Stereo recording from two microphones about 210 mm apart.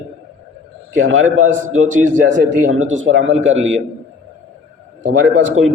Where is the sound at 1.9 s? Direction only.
35° right (ahead or behind).